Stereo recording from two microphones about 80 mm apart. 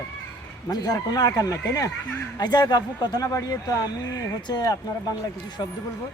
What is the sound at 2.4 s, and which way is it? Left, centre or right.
A man's voice, left.